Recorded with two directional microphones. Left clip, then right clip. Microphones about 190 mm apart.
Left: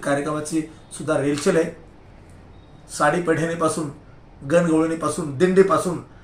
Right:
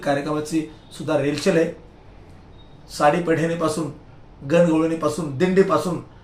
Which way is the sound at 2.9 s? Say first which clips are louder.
Right 1 dB; centre (ahead or behind).